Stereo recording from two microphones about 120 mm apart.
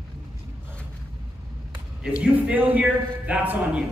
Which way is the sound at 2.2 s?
10° right (ahead or behind).